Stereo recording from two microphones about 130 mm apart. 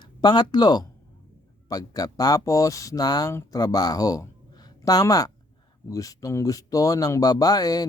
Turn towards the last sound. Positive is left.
turn(degrees=30)  # may be behind; listen again after turning